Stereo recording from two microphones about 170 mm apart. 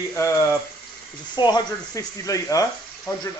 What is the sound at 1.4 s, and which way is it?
Speech, 25° left (ahead or behind).